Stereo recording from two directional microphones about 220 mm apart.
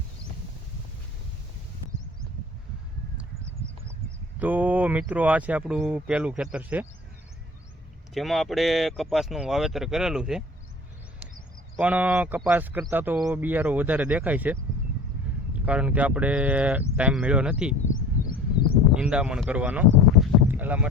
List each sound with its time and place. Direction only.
4.4 s a man's voice: 5° right (ahead or behind)
8.1 s speech: centre (ahead or behind)
11.8 s a man's voice: 5° right (ahead or behind)
15.6 s speech: 5° right (ahead or behind)
17.8 s a sound: 40° left (ahead or behind)
18.9 s speech: 5° right (ahead or behind)
20.2 s boat: 10° right (ahead or behind)